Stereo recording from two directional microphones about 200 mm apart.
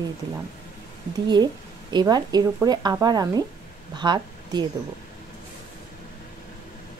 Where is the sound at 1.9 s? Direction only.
20° right (ahead or behind).